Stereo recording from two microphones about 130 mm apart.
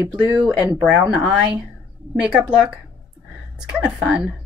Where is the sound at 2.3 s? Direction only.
10° right (ahead or behind).